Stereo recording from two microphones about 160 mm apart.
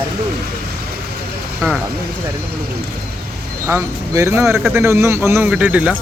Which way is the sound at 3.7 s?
15° right (ahead or behind).